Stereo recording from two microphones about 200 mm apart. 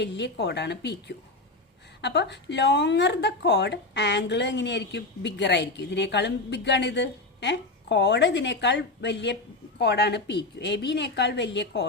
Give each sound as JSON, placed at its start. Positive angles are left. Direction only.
{"t": 0.0, "sound": "speech", "side_deg": 60}